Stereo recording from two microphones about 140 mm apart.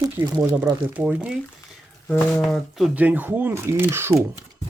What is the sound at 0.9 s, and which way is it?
Speech, 5° right (ahead or behind).